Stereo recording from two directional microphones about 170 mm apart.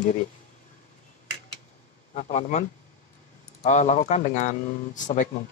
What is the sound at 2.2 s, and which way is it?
Speech, 45° left (ahead or behind).